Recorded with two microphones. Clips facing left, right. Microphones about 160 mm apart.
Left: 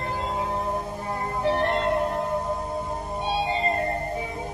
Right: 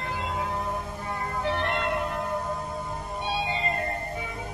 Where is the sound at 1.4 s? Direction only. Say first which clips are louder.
Left 5 dB; 35° left (ahead or behind).